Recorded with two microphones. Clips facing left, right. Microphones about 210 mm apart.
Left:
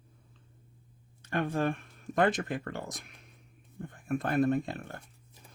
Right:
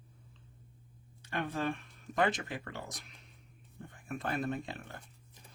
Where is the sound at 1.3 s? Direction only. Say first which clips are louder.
Left 5 dB; 45° left (ahead or behind).